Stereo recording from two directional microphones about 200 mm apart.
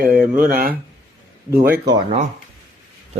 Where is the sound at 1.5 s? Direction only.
10° right (ahead or behind).